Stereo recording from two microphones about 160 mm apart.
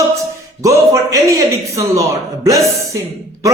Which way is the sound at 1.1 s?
20° right (ahead or behind).